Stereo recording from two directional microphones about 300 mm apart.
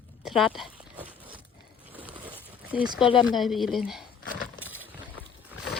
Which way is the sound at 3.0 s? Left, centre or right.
Centre.